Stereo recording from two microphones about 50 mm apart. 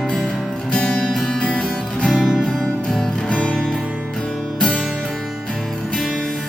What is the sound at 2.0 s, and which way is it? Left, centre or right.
Music, centre.